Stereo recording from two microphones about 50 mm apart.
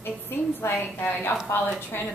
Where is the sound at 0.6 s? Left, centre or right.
Left.